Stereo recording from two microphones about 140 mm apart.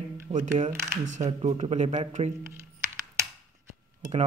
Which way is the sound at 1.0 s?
55° right (ahead or behind).